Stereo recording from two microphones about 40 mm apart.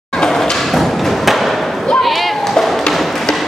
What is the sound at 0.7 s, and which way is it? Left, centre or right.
Thump, centre.